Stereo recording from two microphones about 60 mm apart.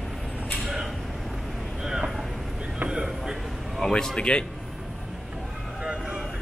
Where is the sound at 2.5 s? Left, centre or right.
Centre.